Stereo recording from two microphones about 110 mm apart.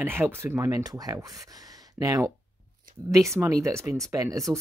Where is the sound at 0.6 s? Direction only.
30° right (ahead or behind).